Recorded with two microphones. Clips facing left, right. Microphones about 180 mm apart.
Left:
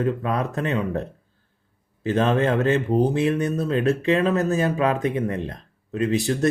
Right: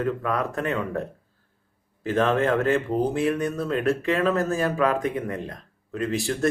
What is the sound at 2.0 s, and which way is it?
Speech, 20° left (ahead or behind).